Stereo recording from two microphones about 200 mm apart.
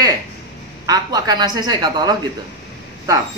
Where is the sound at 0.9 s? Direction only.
20° right (ahead or behind).